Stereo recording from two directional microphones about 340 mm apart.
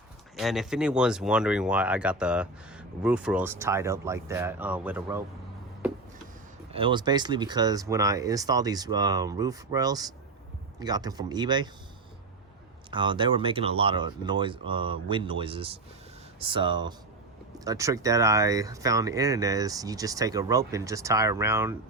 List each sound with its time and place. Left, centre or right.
0.3 s speech: centre
6.7 s speech: centre
12.9 s speech: centre